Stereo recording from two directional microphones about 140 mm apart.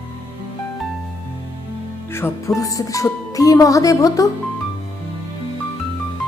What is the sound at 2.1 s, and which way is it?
Speech, 15° left (ahead or behind).